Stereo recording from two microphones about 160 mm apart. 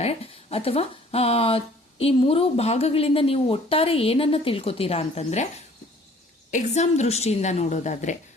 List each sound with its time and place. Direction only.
0.0 s speech: 40° left (ahead or behind)
6.5 s a woman's voice: 45° left (ahead or behind)